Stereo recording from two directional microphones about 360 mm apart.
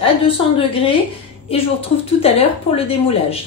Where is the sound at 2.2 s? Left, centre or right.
Centre.